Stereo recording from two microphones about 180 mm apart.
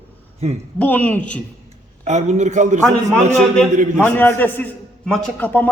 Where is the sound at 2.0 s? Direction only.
40° right (ahead or behind).